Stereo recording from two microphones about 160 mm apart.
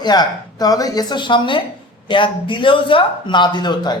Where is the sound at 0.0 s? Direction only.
25° left (ahead or behind).